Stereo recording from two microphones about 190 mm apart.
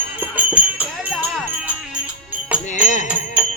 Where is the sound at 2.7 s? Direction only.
40° left (ahead or behind).